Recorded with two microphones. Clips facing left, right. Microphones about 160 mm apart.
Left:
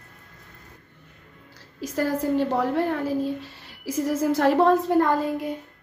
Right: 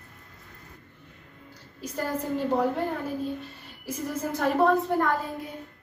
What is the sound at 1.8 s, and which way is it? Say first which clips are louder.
A woman's voice: left 6 dB; 90° left.